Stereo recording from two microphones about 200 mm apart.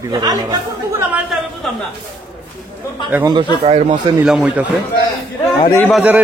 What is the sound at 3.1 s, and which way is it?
Speech, 15° right (ahead or behind).